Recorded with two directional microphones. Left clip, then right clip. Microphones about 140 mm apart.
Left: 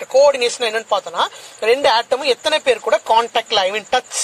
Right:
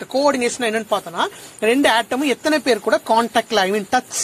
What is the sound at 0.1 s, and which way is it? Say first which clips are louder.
Speech: left 5 dB; 15° right (ahead or behind).